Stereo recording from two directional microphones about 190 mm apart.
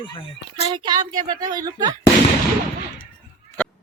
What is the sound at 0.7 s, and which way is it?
Speech, 25° right (ahead or behind).